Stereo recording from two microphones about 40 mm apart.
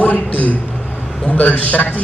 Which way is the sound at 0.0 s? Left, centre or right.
Left.